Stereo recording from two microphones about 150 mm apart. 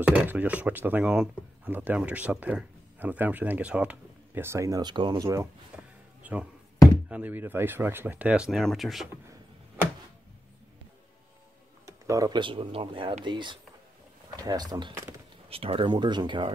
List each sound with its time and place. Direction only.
0.0 s speech: 10° right (ahead or behind)
6.2 s speech: 10° right (ahead or behind)
11.8 s speech: 20° right (ahead or behind)